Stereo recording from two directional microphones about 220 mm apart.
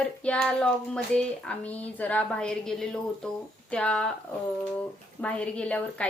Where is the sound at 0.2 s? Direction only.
5° left (ahead or behind).